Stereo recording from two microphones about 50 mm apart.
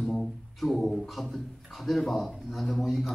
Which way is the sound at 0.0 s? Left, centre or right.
Centre.